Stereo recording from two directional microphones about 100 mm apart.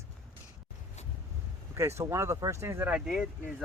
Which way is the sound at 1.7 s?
30° right (ahead or behind).